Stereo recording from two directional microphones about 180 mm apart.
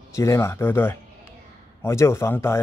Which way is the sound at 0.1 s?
15° left (ahead or behind).